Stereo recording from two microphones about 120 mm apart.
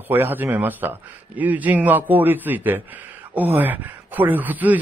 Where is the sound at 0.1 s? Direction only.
15° right (ahead or behind).